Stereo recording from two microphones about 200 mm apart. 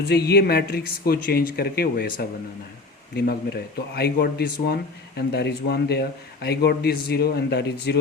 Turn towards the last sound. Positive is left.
turn(degrees=55)  # may be behind; listen again after turning